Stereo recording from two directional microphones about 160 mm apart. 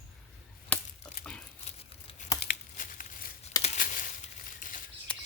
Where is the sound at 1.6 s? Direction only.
40° left (ahead or behind).